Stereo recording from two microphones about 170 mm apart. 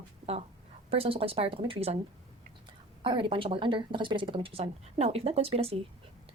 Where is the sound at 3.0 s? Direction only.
30° right (ahead or behind).